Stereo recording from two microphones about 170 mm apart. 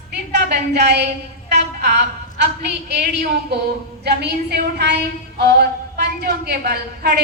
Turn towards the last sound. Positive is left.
turn(degrees=-70)  # may be behind; listen again after turning